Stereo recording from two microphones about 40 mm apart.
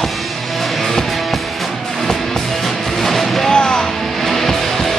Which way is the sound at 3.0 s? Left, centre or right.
Centre.